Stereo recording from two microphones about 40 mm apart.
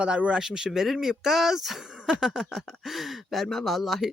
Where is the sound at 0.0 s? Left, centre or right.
Right.